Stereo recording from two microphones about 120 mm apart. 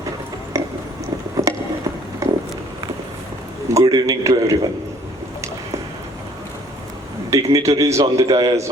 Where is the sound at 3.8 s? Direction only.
30° right (ahead or behind).